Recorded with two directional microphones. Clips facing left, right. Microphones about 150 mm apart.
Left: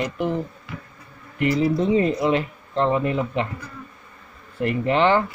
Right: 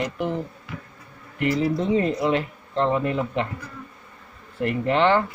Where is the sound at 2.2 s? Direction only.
20° left (ahead or behind).